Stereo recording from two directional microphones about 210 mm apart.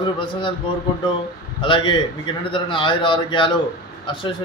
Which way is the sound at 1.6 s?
25° left (ahead or behind).